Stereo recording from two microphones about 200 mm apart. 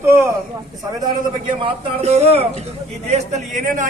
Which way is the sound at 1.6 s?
30° right (ahead or behind).